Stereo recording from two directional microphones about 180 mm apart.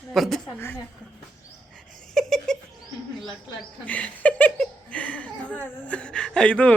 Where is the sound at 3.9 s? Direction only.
5° left (ahead or behind).